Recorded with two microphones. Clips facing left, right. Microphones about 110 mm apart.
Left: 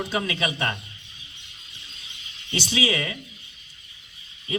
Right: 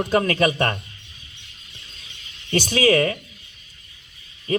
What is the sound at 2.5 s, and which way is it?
Speech, 50° right (ahead or behind).